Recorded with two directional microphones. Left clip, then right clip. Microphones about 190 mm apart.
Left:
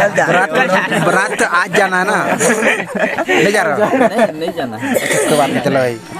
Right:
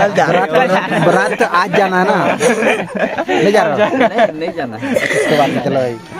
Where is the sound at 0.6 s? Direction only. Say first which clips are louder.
Right 1 dB; 40° right (ahead or behind).